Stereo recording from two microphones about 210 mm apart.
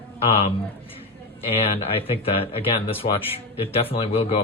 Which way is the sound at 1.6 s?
30° left (ahead or behind).